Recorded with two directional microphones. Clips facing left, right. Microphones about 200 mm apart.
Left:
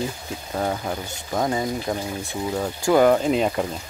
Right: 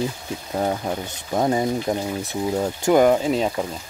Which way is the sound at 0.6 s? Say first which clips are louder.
Right 2 dB; 15° right (ahead or behind).